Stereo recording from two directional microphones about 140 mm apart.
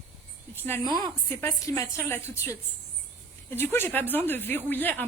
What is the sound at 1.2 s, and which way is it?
Speech, 20° left (ahead or behind).